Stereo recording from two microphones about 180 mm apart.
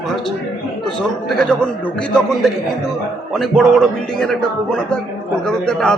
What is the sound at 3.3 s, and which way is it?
Speech, centre (ahead or behind).